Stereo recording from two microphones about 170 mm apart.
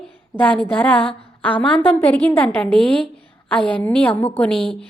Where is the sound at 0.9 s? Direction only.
30° left (ahead or behind).